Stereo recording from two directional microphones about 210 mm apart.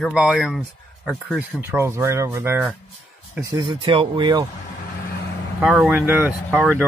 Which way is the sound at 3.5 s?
20° right (ahead or behind).